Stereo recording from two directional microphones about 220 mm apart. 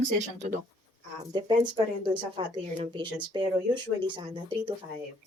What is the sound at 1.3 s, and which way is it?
Speech, 20° right (ahead or behind).